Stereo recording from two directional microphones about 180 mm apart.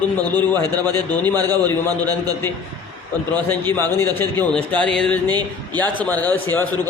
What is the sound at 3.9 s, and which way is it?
Speech, 10° left (ahead or behind).